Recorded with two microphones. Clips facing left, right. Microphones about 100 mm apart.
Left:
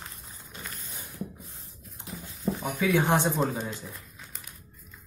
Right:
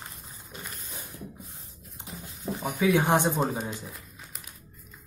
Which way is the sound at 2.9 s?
15° right (ahead or behind).